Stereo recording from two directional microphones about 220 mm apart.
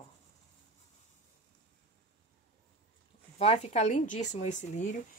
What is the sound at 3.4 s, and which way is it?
Speech, 30° left (ahead or behind).